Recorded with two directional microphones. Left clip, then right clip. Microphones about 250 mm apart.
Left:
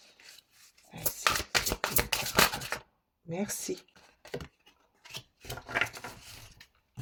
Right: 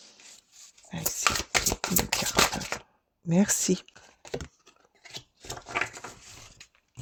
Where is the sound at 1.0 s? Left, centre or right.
Right.